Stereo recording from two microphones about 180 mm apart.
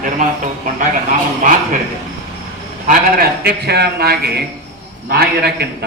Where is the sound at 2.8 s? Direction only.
50° right (ahead or behind).